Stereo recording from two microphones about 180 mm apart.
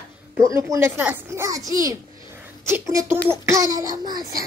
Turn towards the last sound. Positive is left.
turn(degrees=-20)  # may be behind; listen again after turning